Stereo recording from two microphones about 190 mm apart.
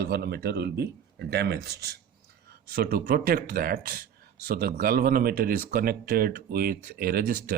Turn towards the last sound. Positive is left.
turn(degrees=-50)  # may be behind; listen again after turning